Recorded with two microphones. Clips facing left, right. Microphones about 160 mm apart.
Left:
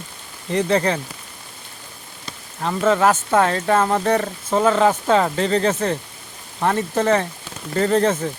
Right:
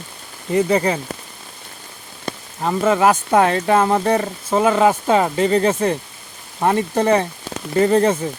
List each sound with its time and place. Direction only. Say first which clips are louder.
0.5 s speech: right 2 dB; 10° right (ahead or behind)
2.6 s speech: right 1 dB; 10° right (ahead or behind)